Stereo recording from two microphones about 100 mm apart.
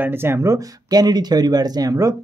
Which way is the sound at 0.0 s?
25° right (ahead or behind).